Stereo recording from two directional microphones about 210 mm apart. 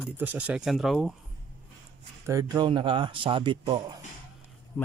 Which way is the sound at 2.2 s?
15° right (ahead or behind).